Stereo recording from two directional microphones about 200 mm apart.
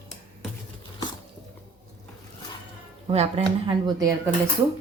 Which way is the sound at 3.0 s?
25° right (ahead or behind).